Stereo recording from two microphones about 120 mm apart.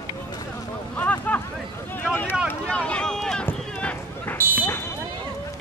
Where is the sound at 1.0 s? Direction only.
15° left (ahead or behind).